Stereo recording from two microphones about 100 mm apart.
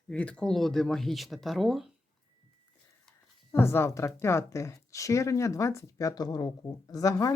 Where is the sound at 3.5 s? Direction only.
25° left (ahead or behind).